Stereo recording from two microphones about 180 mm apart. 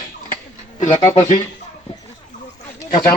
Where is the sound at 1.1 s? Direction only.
20° left (ahead or behind).